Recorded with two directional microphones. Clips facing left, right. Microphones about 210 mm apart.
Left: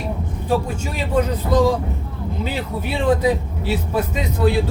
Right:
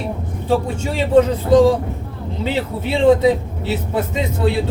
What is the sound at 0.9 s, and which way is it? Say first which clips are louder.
Speech: right 7 dB; 30° right (ahead or behind).